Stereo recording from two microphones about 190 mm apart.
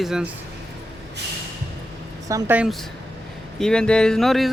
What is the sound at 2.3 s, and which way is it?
Speech, 10° right (ahead or behind).